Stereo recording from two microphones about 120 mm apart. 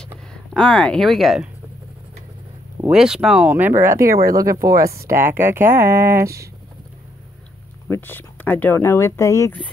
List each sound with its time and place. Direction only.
0.0 s speech: 5° left (ahead or behind)
2.9 s speech: 5° right (ahead or behind); by 6.5 s 25° right (ahead or behind)
7.9 s speech: 15° left (ahead or behind)